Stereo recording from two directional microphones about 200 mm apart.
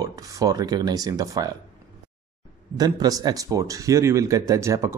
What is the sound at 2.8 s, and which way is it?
Speech, 20° right (ahead or behind).